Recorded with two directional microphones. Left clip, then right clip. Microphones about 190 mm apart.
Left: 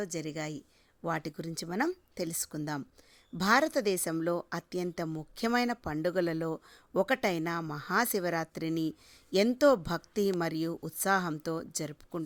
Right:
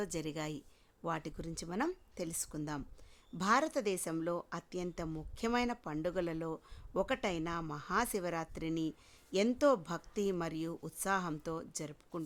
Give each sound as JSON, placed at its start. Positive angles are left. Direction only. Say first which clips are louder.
{"t": 0.0, "sound": "a woman's voice", "louder": "left 3 dB", "side_deg": 10}